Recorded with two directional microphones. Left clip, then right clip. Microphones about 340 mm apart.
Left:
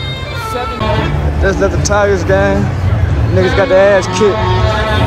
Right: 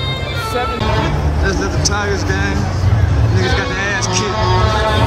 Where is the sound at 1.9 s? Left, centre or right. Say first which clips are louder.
Left 8 dB; centre.